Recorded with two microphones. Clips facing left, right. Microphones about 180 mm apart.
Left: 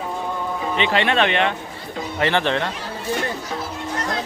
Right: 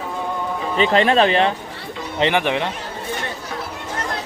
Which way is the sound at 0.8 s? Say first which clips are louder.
Right 5 dB; 35° right (ahead or behind).